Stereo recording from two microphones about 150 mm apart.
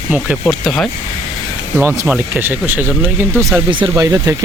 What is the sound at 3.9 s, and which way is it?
Speech, 20° right (ahead or behind).